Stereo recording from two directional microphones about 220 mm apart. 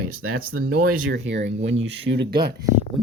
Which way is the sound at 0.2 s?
75° right (ahead or behind).